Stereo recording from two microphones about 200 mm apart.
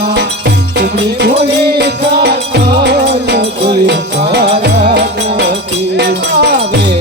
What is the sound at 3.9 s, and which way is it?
Music, 55° right (ahead or behind).